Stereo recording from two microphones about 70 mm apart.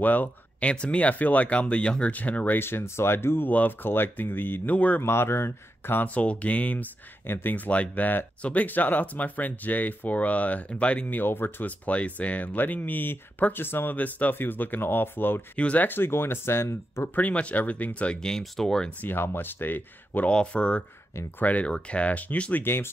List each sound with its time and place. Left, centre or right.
0.0 s speech: left
5.0 s speech: left
6.0 s speech: centre
15.5 s speech: centre; by 17.1 s left
17.1 s speech: left
18.9 s speech: left
20.2 s speech: centre; by 22.8 s left